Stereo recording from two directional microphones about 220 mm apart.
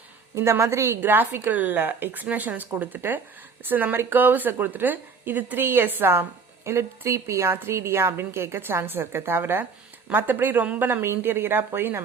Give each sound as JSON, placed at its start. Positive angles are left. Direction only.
{"t": 0.3, "sound": "a woman's voice", "side_deg": -10}